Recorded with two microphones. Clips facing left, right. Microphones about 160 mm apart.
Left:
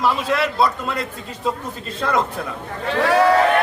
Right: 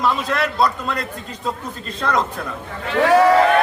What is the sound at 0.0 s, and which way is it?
A man's voice, 5° left (ahead or behind).